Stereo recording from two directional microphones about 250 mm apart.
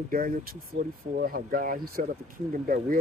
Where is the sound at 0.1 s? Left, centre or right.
Right.